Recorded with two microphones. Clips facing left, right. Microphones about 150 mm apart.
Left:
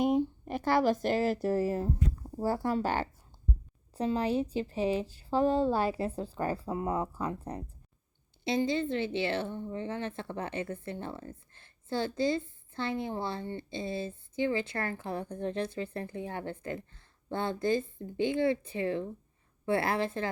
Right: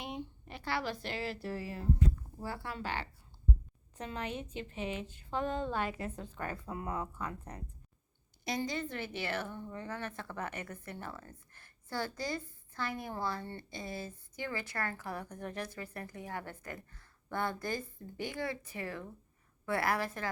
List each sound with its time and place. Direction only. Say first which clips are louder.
0.0 s speech: left 15 dB; 45° left (ahead or behind)
3.9 s a woman's voice: left 11 dB; 35° left (ahead or behind)